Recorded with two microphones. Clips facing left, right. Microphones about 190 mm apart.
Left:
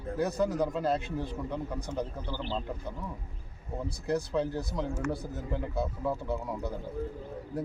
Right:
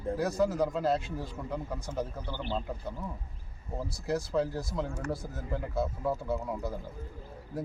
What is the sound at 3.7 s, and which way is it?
A man's voice, centre (ahead or behind).